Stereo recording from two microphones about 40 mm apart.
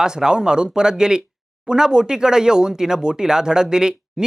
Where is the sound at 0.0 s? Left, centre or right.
Centre.